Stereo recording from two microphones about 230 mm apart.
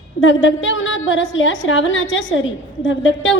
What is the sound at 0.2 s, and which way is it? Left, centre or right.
A woman's voice, left.